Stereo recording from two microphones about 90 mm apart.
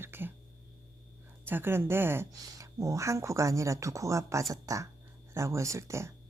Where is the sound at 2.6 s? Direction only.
35° right (ahead or behind).